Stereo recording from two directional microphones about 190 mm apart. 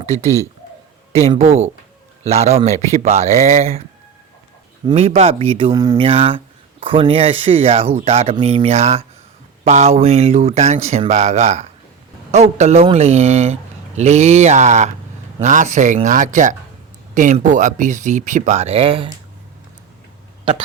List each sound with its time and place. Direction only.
0.0 s a man's voice: 35° right (ahead or behind)
4.9 s speech: 30° right (ahead or behind)
20.4 s speech: 30° right (ahead or behind)